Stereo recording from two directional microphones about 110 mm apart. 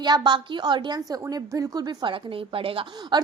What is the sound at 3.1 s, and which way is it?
Speech, 45° right (ahead or behind).